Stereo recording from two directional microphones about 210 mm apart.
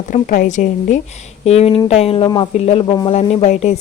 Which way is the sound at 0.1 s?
40° left (ahead or behind).